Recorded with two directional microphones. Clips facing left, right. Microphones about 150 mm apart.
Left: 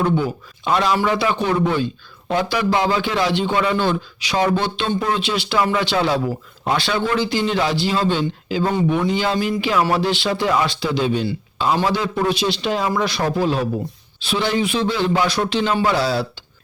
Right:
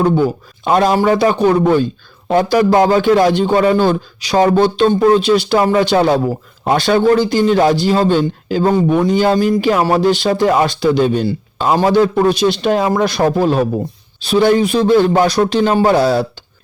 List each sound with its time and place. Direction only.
0.0 s a man's voice: 40° right (ahead or behind)